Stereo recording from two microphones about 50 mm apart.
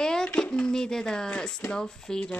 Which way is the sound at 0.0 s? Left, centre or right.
Centre.